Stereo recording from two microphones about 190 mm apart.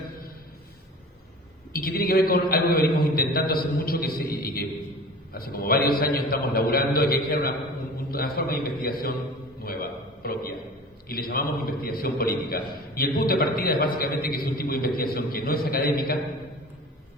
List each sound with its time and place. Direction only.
1.7 s a man's voice: 50° left (ahead or behind)
9.6 s a sound: 50° left (ahead or behind)
11.1 s a man's voice: 50° left (ahead or behind)